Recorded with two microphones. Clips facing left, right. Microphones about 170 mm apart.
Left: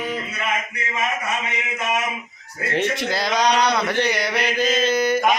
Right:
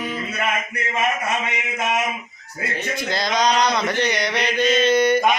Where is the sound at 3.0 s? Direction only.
10° left (ahead or behind).